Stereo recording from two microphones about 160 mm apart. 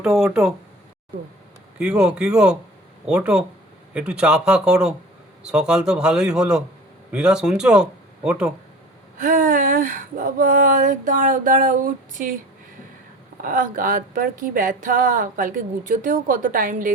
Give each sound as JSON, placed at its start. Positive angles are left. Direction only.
{"t": 0.0, "sound": "speech", "side_deg": -5}
{"t": 1.8, "sound": "speech", "side_deg": -5}
{"t": 9.1, "sound": "a woman's voice", "side_deg": -55}
{"t": 13.4, "sound": "a woman's voice", "side_deg": -60}